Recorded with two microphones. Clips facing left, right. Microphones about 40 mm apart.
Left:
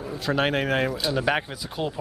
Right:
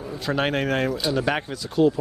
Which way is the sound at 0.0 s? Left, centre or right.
Centre.